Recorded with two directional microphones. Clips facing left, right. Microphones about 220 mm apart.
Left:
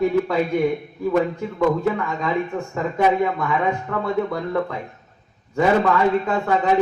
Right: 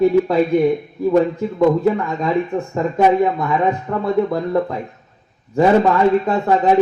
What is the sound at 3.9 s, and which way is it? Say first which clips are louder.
Speech: right 3 dB; 30° right (ahead or behind).